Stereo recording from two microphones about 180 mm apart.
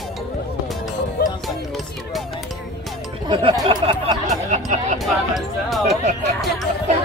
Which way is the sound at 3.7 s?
30° right (ahead or behind).